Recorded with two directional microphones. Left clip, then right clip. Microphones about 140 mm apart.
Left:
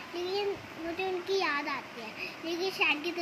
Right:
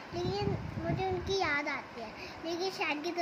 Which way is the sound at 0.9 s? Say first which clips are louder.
Left 2 dB; 10° right (ahead or behind).